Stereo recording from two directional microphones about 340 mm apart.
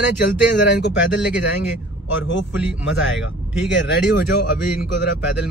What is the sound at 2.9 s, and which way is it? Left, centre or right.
Speech, left.